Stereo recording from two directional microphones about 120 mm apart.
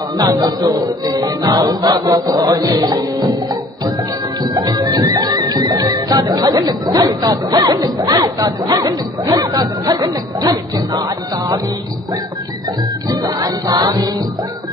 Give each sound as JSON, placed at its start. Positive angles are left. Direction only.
{"t": 0.2, "sound": "music", "side_deg": -35}
{"t": 4.4, "sound": "music", "side_deg": -35}
{"t": 13.1, "sound": "music", "side_deg": -30}